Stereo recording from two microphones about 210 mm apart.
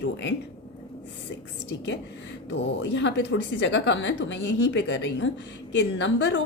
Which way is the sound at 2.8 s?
60° left (ahead or behind).